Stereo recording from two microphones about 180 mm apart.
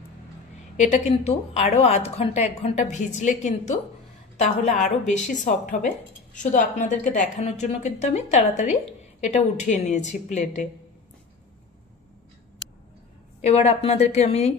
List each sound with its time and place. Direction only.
0.7 s a woman's voice: 40° left (ahead or behind)
13.4 s a woman's voice: 35° left (ahead or behind)